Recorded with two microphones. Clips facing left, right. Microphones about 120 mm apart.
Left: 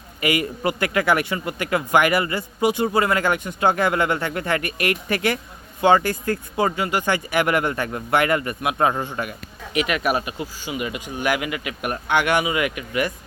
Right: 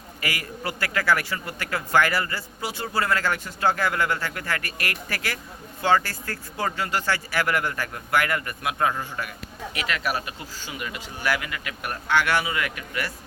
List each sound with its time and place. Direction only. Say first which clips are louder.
0.2 s a man's voice: left 9 dB; 20° left (ahead or behind)